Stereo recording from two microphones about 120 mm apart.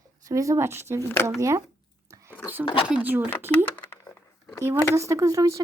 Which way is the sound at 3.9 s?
20° left (ahead or behind).